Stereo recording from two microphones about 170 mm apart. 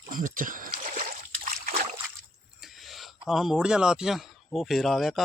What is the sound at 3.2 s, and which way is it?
A man's voice, centre (ahead or behind).